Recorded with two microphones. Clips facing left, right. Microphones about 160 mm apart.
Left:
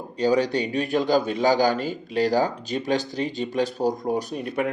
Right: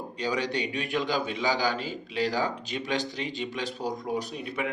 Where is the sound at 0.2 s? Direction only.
40° left (ahead or behind).